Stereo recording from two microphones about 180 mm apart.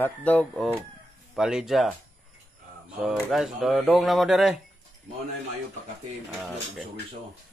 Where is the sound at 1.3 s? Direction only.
Centre (ahead or behind).